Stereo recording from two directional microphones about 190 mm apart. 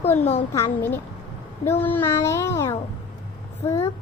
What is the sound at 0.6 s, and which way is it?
A child's voice, 10° left (ahead or behind).